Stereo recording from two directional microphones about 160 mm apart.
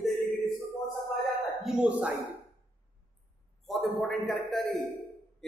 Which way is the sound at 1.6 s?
5° right (ahead or behind).